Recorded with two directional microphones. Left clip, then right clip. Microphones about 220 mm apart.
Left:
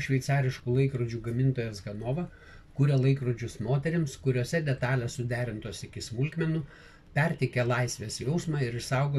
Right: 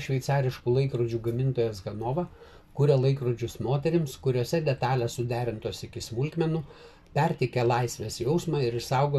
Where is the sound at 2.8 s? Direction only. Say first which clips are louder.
Right 6 dB; 20° right (ahead or behind).